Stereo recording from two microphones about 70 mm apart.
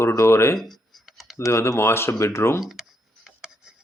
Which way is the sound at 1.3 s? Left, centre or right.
Left.